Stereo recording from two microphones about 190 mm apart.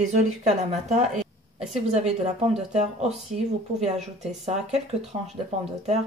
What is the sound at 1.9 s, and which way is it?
Speech, 35° right (ahead or behind).